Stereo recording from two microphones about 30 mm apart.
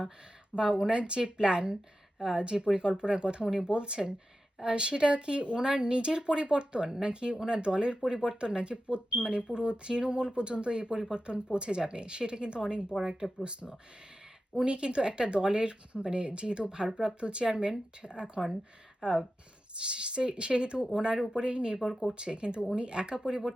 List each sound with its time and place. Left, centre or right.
0.5 s speech: right
6.8 s speech: right
7.1 s speech: right